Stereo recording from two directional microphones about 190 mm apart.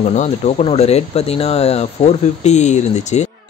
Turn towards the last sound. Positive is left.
turn(degrees=35)  # may be behind; listen again after turning